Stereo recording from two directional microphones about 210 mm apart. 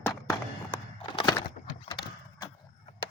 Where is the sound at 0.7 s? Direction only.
20° left (ahead or behind).